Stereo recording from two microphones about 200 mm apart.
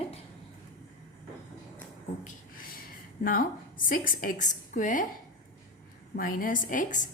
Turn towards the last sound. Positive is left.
turn(degrees=40)  # may be behind; listen again after turning